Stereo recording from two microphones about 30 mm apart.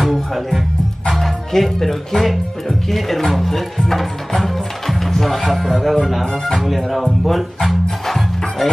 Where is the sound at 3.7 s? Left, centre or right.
Centre.